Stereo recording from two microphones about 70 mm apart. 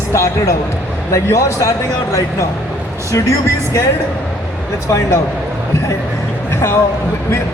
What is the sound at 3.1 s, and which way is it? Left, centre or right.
Speech, left.